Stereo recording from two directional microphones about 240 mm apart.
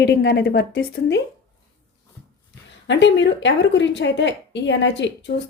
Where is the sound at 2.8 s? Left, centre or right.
Left.